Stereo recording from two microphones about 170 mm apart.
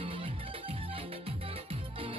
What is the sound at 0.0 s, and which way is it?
Music, 30° right (ahead or behind).